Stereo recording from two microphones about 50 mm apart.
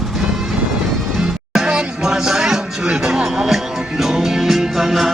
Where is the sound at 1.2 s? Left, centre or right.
Centre.